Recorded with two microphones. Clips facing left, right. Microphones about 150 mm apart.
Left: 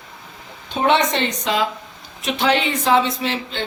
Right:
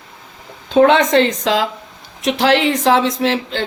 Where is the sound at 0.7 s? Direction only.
90° right.